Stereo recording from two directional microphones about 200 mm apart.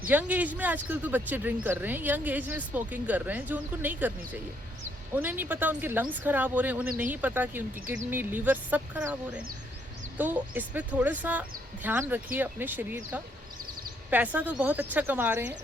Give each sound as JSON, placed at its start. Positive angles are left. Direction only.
{"t": 0.1, "sound": "speech", "side_deg": -10}
{"t": 9.3, "sound": "speech", "side_deg": -45}
{"t": 10.2, "sound": "speech", "side_deg": -10}